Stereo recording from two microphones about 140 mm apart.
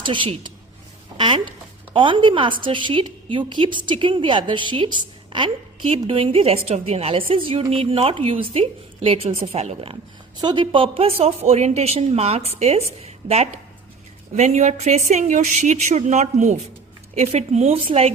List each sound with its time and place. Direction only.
0.0 s a woman's voice: 35° right (ahead or behind)
1.1 s a sound: 35° right (ahead or behind)
1.9 s a woman's voice: 35° right (ahead or behind)
10.4 s a woman's voice: 35° right (ahead or behind)